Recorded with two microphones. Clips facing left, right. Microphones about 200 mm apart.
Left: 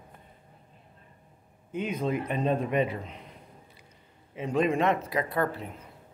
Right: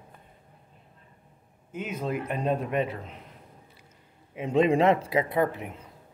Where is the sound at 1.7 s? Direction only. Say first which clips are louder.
Left 2 dB; 5° right (ahead or behind).